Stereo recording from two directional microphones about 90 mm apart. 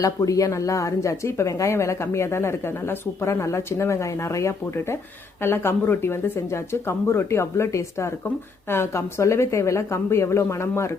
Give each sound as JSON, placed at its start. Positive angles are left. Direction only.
{"t": 0.0, "sound": "speech", "side_deg": 40}